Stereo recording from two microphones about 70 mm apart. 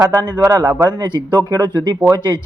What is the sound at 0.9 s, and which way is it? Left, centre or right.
Speech, right.